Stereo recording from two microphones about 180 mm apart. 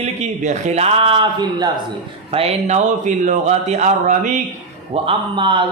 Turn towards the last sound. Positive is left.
turn(degrees=-30)  # may be behind; listen again after turning